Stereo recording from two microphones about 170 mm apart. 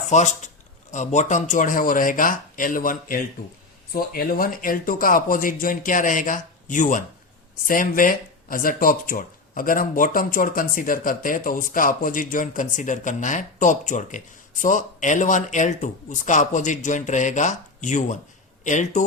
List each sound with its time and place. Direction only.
0.0 s a man's voice: 45° left (ahead or behind)